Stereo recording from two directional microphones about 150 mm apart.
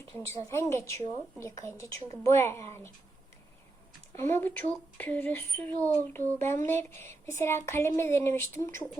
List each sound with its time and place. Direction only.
0.3 s a woman's voice: 20° left (ahead or behind)
4.1 s speech: 20° left (ahead or behind)